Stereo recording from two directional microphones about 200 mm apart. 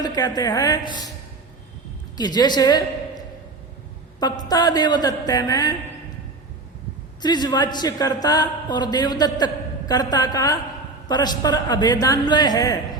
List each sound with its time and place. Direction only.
0.0 s a man's voice: 20° left (ahead or behind)
2.1 s a woman's voice: 20° left (ahead or behind)
4.4 s a man's voice: 20° left (ahead or behind)
7.2 s a man's voice: 20° left (ahead or behind)